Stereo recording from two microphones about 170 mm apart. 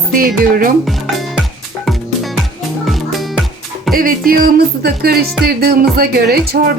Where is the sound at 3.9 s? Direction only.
55° right (ahead or behind).